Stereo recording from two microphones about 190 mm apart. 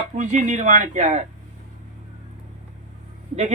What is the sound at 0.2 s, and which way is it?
Speech, 40° right (ahead or behind).